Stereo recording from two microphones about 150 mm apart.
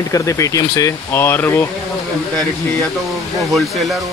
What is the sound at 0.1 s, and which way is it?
Speech, 20° left (ahead or behind).